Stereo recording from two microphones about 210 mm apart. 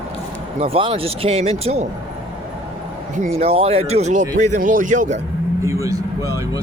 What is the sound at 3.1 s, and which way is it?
Speech, 35° right (ahead or behind).